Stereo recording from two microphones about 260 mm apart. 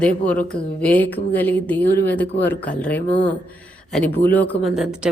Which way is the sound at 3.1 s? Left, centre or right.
Left.